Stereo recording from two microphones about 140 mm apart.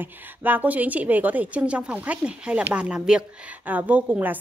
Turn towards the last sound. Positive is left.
turn(degrees=-10)  # may be behind; listen again after turning